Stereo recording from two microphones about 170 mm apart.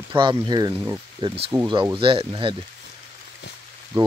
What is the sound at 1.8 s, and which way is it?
Speech, 30° right (ahead or behind).